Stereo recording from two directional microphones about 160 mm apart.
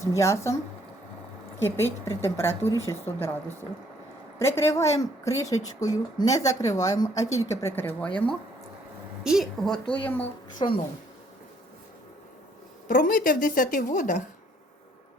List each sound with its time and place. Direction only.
0.1 s speech: 20° left (ahead or behind)
1.6 s a woman's voice: 15° left (ahead or behind)
9.2 s a woman's voice: centre (ahead or behind)
10.6 s speech: 35° left (ahead or behind)
12.9 s a woman's voice: 60° left (ahead or behind)